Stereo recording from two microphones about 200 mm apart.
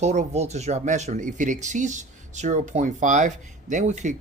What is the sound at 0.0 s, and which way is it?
Speech, 35° right (ahead or behind).